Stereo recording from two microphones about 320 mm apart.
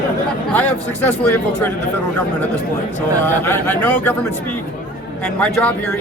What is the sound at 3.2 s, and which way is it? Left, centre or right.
Speech, centre.